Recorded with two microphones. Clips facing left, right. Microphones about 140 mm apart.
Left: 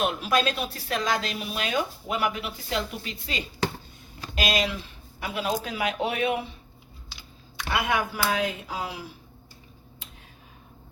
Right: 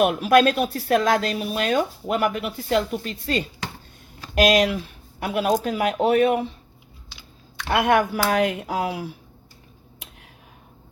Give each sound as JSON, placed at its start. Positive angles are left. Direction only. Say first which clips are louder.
{"t": 0.3, "sound": "speech", "louder": "right 9 dB", "side_deg": -55}
{"t": 4.4, "sound": "speech", "louder": "right 9 dB", "side_deg": -60}
{"t": 7.7, "sound": "speech", "louder": "right 7 dB", "side_deg": -60}